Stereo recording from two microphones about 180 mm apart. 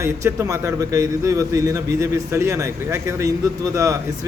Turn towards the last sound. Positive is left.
turn(degrees=-15)  # may be behind; listen again after turning